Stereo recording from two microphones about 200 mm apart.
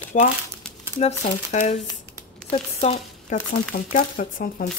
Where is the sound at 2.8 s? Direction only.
40° left (ahead or behind).